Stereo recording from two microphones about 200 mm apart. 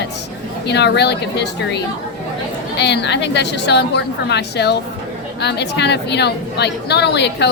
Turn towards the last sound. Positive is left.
turn(degrees=55)  # may be behind; listen again after turning